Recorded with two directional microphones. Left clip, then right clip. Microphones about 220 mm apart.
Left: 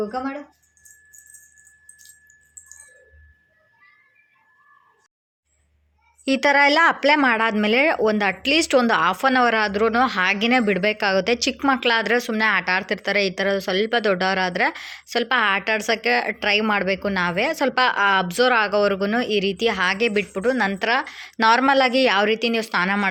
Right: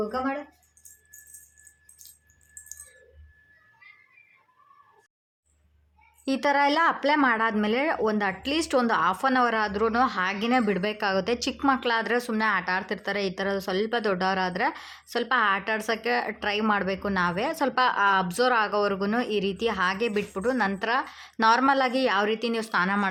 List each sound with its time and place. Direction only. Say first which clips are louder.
0.0 s speech: left 2 dB; 35° left (ahead or behind)
6.2 s speech: left 6 dB; 10° left (ahead or behind)